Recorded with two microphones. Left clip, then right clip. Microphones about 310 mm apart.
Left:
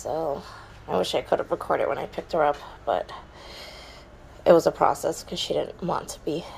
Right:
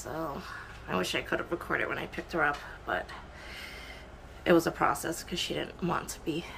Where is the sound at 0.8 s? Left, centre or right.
Centre.